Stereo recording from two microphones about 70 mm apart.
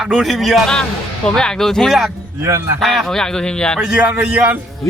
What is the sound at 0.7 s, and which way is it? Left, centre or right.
A man's voice, centre.